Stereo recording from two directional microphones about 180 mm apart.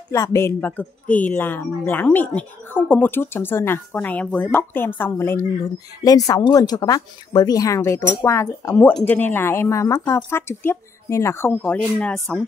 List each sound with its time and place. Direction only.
0.1 s speech: 15° left (ahead or behind)